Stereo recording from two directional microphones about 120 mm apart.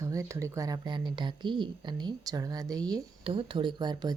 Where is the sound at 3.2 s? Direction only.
45° right (ahead or behind).